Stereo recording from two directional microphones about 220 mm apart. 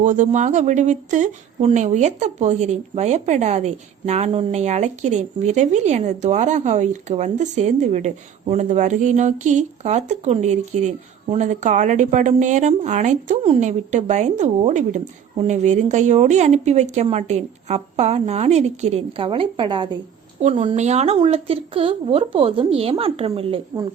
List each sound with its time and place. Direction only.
0.0 s a woman's voice: 35° right (ahead or behind)